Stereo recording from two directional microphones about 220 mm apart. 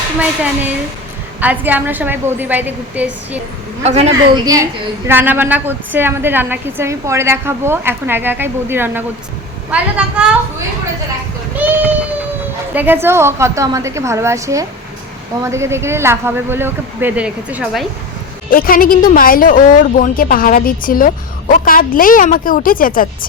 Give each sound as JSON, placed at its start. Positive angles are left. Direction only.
{"t": 1.4, "sound": "a woman's voice", "side_deg": -5}
{"t": 3.8, "sound": "a woman's voice", "side_deg": -30}
{"t": 4.4, "sound": "a woman's voice", "side_deg": -15}
{"t": 11.5, "sound": "a woman's voice", "side_deg": -5}
{"t": 18.5, "sound": "a woman's voice", "side_deg": 40}